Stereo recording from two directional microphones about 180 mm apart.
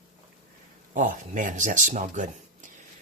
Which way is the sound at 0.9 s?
45° right (ahead or behind).